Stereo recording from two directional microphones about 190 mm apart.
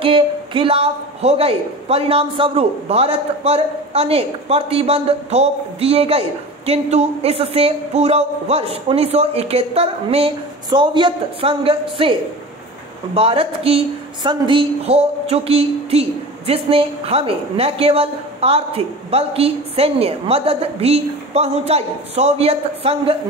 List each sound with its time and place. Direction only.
0.0 s a man's voice: 30° right (ahead or behind)